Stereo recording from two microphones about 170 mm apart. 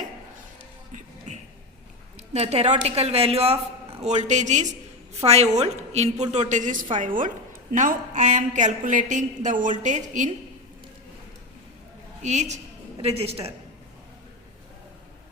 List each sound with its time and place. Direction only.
1.3 s a sound: 45° right (ahead or behind)
2.1 s a woman's voice: 40° right (ahead or behind)
12.2 s a woman's voice: 45° right (ahead or behind)